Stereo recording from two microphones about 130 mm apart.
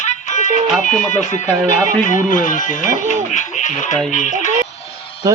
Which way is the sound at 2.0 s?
75° left (ahead or behind).